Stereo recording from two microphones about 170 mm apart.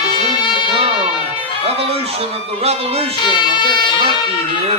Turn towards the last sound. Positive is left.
turn(degrees=25)  # may be behind; listen again after turning